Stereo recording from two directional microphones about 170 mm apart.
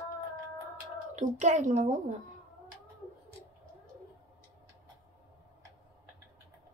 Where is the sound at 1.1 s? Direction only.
45° right (ahead or behind).